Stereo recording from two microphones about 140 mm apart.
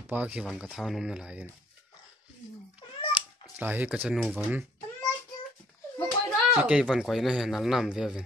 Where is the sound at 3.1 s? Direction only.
10° right (ahead or behind).